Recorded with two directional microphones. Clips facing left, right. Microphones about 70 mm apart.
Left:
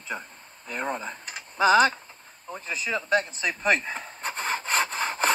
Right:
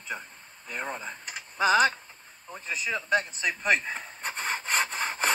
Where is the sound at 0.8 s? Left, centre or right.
Left.